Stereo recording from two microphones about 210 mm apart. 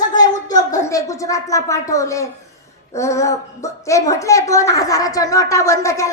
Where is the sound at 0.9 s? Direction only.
15° left (ahead or behind).